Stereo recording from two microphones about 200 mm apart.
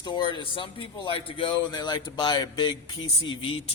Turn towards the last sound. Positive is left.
turn(degrees=25)  # may be behind; listen again after turning